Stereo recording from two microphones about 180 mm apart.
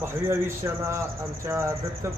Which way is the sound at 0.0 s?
15° right (ahead or behind).